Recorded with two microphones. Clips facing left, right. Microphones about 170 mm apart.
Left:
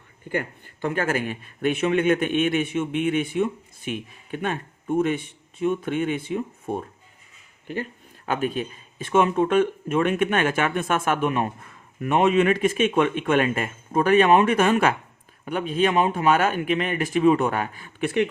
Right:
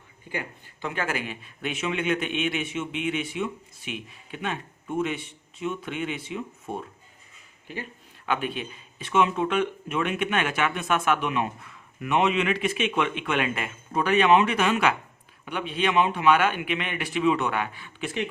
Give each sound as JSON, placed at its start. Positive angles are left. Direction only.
{"t": 0.3, "sound": "a man's voice", "side_deg": 50}
{"t": 8.3, "sound": "a man's voice", "side_deg": 40}